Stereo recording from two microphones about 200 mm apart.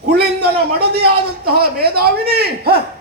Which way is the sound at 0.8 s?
50° right (ahead or behind).